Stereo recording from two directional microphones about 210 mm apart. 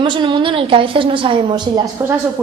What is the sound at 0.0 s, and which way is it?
A woman's voice, 25° right (ahead or behind).